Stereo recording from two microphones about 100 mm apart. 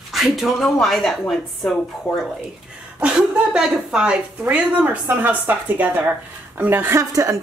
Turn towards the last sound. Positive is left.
turn(degrees=-35)  # may be behind; listen again after turning